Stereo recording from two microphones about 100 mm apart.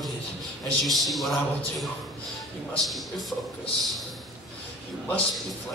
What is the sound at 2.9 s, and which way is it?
Speech, centre (ahead or behind).